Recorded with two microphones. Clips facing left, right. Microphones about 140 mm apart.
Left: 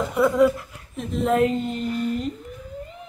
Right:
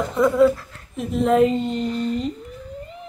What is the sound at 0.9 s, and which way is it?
A woman's voice, centre (ahead or behind).